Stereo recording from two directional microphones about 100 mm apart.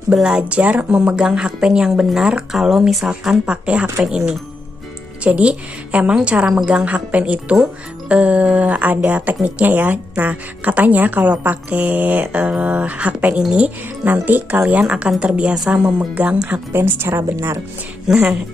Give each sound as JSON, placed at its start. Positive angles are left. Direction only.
{"t": 0.1, "sound": "a woman's voice", "side_deg": -5}
{"t": 5.2, "sound": "a woman's voice", "side_deg": -10}
{"t": 16.7, "sound": "speech", "side_deg": -25}
{"t": 18.0, "sound": "a woman's voice", "side_deg": -5}